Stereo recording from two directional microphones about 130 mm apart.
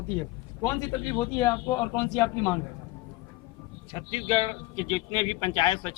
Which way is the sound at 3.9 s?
40° left (ahead or behind).